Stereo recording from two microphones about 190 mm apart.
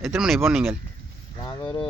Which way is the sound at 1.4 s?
20° left (ahead or behind).